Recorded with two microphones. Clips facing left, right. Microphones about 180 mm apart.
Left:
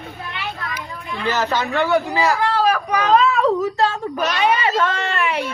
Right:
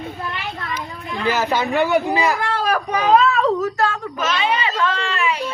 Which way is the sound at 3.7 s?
25° left (ahead or behind).